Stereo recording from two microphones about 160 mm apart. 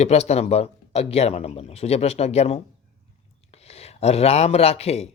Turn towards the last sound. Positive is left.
turn(degrees=40)  # may be behind; listen again after turning